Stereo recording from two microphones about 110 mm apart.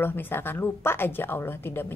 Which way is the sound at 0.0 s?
20° left (ahead or behind).